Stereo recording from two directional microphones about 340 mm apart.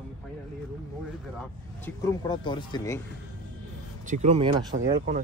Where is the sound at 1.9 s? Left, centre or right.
Centre.